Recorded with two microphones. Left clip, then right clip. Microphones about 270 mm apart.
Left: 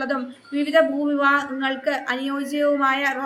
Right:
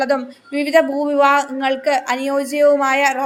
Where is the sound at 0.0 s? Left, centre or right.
Right.